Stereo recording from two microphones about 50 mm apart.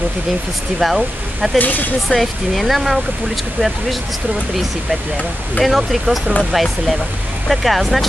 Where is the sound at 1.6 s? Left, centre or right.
Left.